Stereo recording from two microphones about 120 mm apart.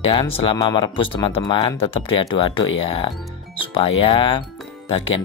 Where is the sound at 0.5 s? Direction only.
35° left (ahead or behind).